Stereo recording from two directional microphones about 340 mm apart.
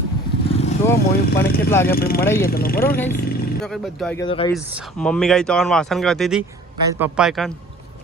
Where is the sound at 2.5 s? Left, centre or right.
Left.